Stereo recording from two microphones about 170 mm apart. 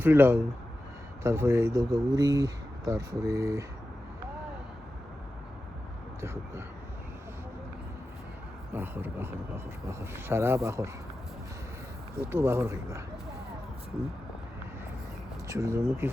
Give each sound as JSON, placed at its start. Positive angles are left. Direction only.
{"t": 0.0, "sound": "speech", "side_deg": -15}
{"t": 8.7, "sound": "speech", "side_deg": -10}
{"t": 12.3, "sound": "speech", "side_deg": -15}
{"t": 15.4, "sound": "speech", "side_deg": -15}